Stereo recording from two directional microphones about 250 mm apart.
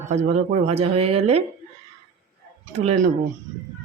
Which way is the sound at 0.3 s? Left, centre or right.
Right.